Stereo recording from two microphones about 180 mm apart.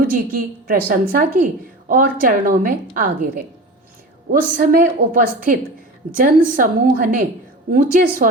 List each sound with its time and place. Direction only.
0.0 s a woman's voice: 50° right (ahead or behind)
4.3 s a woman's voice: 55° right (ahead or behind)